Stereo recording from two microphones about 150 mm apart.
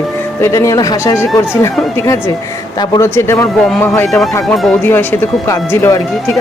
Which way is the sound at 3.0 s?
20° left (ahead or behind).